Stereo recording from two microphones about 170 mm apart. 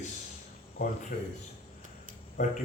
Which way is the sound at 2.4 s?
40° left (ahead or behind).